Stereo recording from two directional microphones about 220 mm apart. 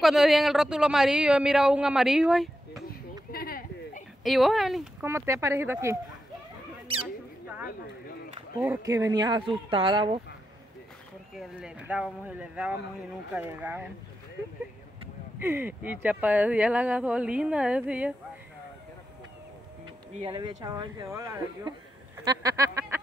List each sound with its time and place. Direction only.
0.0 s speech: centre (ahead or behind)
2.9 s a sound: 40° left (ahead or behind)
4.2 s speech: centre (ahead or behind)
5.0 s speech: 10° right (ahead or behind)
6.9 s a sound: 25° right (ahead or behind)
8.4 s speech: 15° right (ahead or behind)
11.3 s speech: 5° right (ahead or behind)
15.4 s speech: 10° right (ahead or behind)
20.2 s speech: 20° right (ahead or behind)